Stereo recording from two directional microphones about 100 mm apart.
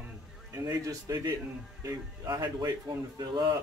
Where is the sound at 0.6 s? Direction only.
40° right (ahead or behind).